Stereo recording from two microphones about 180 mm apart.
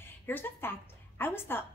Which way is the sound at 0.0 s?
10° left (ahead or behind).